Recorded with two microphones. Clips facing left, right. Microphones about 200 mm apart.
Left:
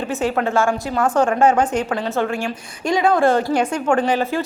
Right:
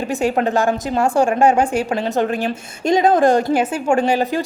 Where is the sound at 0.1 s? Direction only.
15° right (ahead or behind).